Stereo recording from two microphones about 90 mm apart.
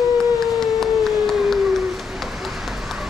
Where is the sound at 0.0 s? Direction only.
Centre (ahead or behind).